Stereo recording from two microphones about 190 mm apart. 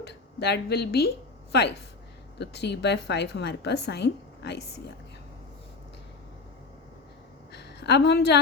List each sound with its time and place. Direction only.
0.0 s speech: 60° left (ahead or behind)
2.4 s a woman's voice: 65° left (ahead or behind)
7.5 s a sound: 65° left (ahead or behind)